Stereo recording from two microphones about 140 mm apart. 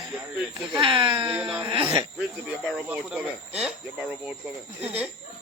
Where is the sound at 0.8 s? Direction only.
35° right (ahead or behind).